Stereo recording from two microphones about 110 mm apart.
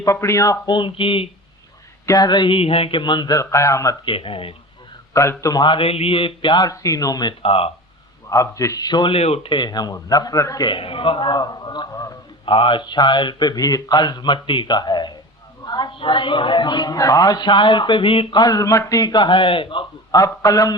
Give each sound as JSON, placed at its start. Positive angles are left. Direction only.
{"t": 0.0, "sound": "speech", "side_deg": 25}
{"t": 0.7, "sound": "a man's voice", "side_deg": 50}
{"t": 2.0, "sound": "a man's voice", "side_deg": 35}
{"t": 3.3, "sound": "speech", "side_deg": 30}
{"t": 4.0, "sound": "speech", "side_deg": 55}
{"t": 5.1, "sound": "speech", "side_deg": 25}
{"t": 5.6, "sound": "a man's voice", "side_deg": 55}
{"t": 7.4, "sound": "speech", "side_deg": 60}
{"t": 8.3, "sound": "a man's voice", "side_deg": 30}
{"t": 9.1, "sound": "a man's voice", "side_deg": 65}
{"t": 10.7, "sound": "a man's voice", "side_deg": 55}
{"t": 11.9, "sound": "speech", "side_deg": 30}
{"t": 12.5, "sound": "a man's voice", "side_deg": 50}
{"t": 20.1, "sound": "a man's voice", "side_deg": 30}